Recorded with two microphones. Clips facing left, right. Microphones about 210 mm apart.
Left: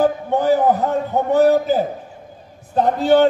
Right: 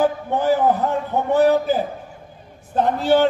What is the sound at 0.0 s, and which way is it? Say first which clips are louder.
A man's voice: left 2 dB; 40° left (ahead or behind).